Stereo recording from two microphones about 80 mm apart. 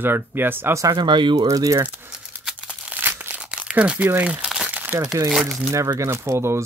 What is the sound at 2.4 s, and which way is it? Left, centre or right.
Crumpling, centre.